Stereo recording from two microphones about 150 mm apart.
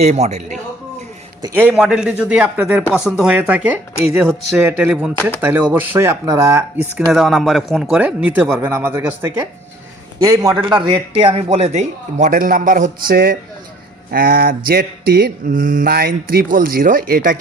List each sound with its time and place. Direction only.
0.0 s a man's voice: 50° right (ahead or behind)
1.5 s speech: 10° right (ahead or behind)
7.1 s a man's voice: centre (ahead or behind); by 10.6 s 20° right (ahead or behind)
11.1 s a man's voice: 40° right (ahead or behind); by 13.3 s 75° right (ahead or behind)
14.1 s mantra: 80° right